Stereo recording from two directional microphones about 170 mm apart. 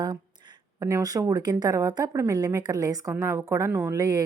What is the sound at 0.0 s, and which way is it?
A woman's voice, 25° right (ahead or behind).